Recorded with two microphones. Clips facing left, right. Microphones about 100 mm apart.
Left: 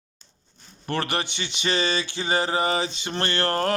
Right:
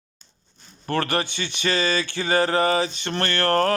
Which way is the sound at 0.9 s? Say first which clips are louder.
Right 3 dB; 20° left (ahead or behind).